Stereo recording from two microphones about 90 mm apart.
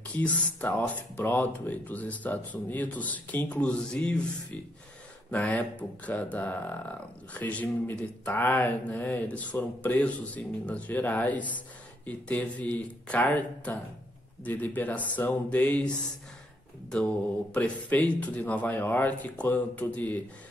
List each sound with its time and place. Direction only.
0.1 s speech: 15° left (ahead or behind)
14.4 s speech: 20° left (ahead or behind)
17.6 s speech: 15° left (ahead or behind)